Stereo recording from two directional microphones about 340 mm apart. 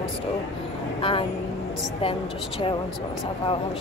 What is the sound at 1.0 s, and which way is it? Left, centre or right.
Speech, centre.